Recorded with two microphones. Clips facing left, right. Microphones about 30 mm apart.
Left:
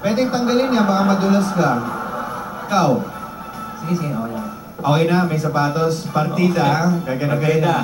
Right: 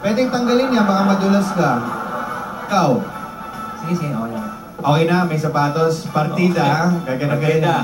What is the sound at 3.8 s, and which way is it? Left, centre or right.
Speech, right.